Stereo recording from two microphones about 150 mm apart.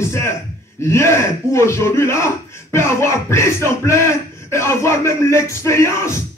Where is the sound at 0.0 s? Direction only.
15° left (ahead or behind).